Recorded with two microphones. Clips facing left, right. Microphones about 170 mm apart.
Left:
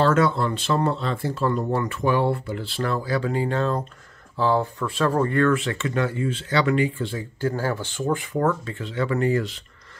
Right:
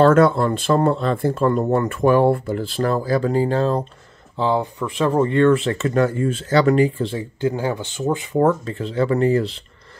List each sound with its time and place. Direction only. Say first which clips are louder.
0.0 s speech: right 6 dB; 50° right (ahead or behind); by 3.8 s 35° right (ahead or behind)
4.4 s speech: right 1 dB; 15° right (ahead or behind); by 7.2 s 30° right (ahead or behind)
7.3 s speech: right 3 dB; 15° right (ahead or behind); by 9.6 s 30° right (ahead or behind)